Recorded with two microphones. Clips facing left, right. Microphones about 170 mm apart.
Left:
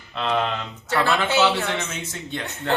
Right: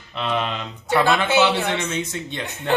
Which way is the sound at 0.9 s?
15° right (ahead or behind).